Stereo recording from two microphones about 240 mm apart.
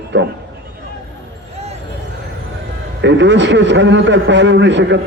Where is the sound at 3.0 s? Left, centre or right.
Right.